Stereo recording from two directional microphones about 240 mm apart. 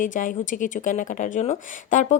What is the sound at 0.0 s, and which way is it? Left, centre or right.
Speech, left.